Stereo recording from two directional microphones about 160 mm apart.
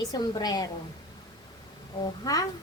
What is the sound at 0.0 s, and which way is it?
Speech, 25° left (ahead or behind).